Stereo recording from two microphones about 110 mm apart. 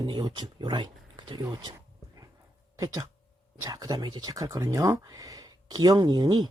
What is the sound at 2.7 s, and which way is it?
Speech, 25° right (ahead or behind).